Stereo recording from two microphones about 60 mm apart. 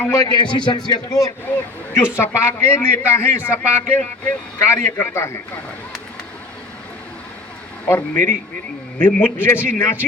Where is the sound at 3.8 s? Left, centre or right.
Left.